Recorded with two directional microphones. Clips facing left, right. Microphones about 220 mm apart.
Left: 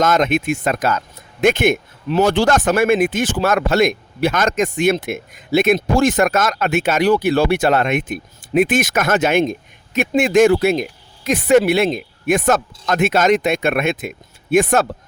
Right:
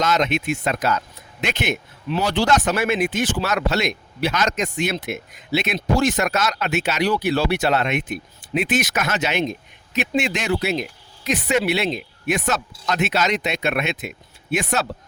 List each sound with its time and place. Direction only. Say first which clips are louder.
0.0 s speech: left 5 dB; 50° left (ahead or behind)